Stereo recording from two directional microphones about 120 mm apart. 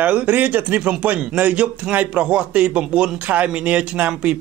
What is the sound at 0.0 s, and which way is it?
A man's voice, 10° right (ahead or behind).